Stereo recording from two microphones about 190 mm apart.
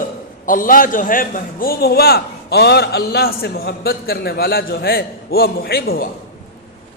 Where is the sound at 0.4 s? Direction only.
45° left (ahead or behind).